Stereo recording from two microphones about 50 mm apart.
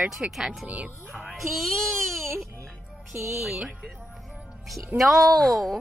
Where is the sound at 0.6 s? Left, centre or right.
Right.